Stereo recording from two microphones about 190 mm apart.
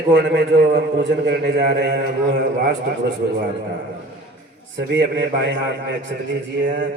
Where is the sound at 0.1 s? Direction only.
65° right (ahead or behind).